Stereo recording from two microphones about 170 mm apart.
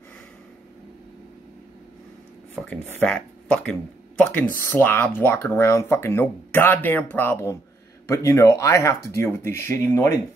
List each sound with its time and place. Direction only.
2.7 s speech: 5° left (ahead or behind)